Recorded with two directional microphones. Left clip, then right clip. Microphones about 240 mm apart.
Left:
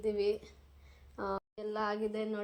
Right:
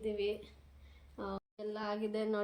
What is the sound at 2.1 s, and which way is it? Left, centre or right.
Speech, centre.